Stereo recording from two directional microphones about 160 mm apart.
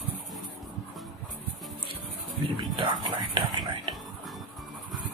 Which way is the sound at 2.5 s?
35° right (ahead or behind).